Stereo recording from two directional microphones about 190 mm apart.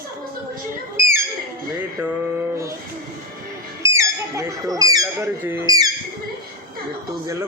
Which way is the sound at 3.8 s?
15° right (ahead or behind).